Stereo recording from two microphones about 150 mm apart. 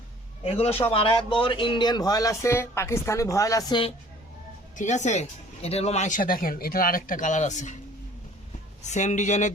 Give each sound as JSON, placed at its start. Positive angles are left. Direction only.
{"t": 0.4, "sound": "a man's voice", "side_deg": 40}
{"t": 4.8, "sound": "speech", "side_deg": 50}
{"t": 8.8, "sound": "speech", "side_deg": 50}